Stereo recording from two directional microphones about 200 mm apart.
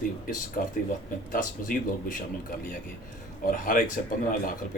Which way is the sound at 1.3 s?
45° left (ahead or behind).